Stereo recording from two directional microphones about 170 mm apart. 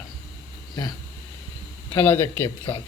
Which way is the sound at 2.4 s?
30° left (ahead or behind).